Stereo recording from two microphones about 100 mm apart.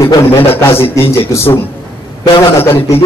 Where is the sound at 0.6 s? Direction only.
25° left (ahead or behind).